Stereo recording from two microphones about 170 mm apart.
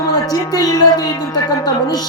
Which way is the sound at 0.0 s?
20° left (ahead or behind).